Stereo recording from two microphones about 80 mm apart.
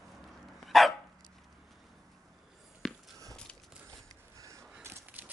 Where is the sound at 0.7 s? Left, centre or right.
Centre.